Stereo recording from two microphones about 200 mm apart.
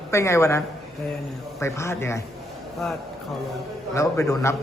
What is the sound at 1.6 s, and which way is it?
Speech, 15° left (ahead or behind).